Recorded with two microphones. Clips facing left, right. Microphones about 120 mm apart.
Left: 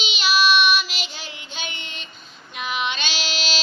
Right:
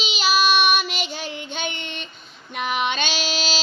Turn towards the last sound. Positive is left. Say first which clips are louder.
# right 3 dB
turn(degrees=-40)  # may be behind; listen again after turning